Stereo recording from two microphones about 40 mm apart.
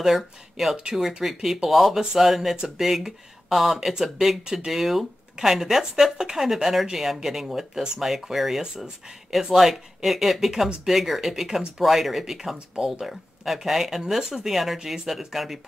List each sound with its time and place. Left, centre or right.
0.0 s speech: centre
12.7 s speech: right
13.0 s speech: centre